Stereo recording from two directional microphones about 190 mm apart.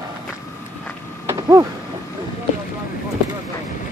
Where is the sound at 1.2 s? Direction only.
15° right (ahead or behind).